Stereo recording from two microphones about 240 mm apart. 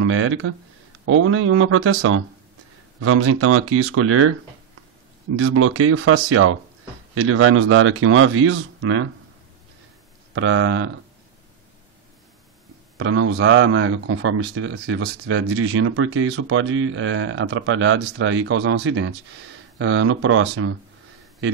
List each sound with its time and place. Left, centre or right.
0.0 s speech: right
5.4 s speech: right
10.3 s speech: right
12.9 s speech: right
15.2 s speech: right